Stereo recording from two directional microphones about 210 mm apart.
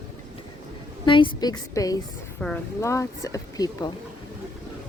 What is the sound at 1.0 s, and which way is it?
Speech, 25° left (ahead or behind).